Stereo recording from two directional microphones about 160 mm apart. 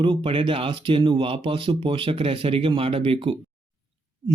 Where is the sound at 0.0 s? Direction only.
30° right (ahead or behind).